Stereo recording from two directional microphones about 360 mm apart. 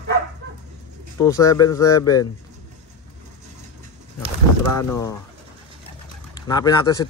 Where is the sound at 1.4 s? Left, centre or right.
Centre.